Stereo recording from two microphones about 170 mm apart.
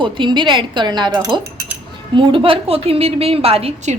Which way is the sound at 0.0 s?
30° right (ahead or behind).